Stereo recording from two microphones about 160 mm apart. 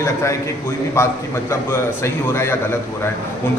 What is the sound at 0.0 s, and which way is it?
A man's voice, 20° left (ahead or behind).